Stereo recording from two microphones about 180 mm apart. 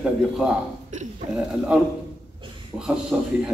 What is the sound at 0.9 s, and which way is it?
Speech, 45° right (ahead or behind).